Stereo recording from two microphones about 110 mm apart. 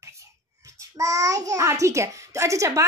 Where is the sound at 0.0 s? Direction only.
25° right (ahead or behind).